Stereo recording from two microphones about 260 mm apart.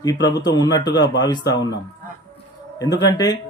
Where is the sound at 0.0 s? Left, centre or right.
Centre.